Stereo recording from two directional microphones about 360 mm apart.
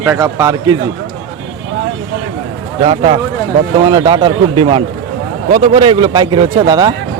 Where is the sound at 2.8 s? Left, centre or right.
Centre.